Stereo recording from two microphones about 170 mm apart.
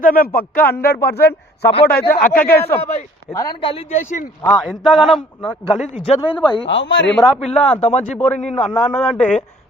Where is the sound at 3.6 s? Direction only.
35° left (ahead or behind).